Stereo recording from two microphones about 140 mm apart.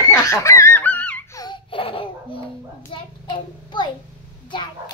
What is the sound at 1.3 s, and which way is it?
Baby laughter, 30° left (ahead or behind).